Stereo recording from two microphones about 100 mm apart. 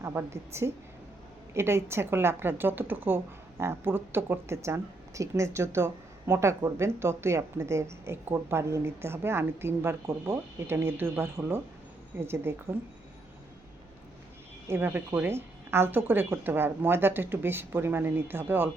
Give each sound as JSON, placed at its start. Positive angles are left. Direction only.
{"t": 0.0, "sound": "speech", "side_deg": -25}
{"t": 14.7, "sound": "speech", "side_deg": -20}